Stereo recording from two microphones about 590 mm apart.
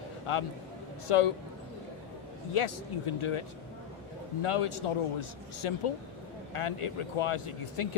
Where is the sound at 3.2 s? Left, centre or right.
Left.